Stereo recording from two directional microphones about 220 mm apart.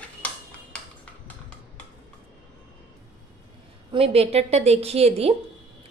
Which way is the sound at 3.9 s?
25° right (ahead or behind).